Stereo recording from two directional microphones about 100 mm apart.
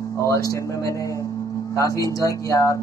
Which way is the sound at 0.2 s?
30° left (ahead or behind).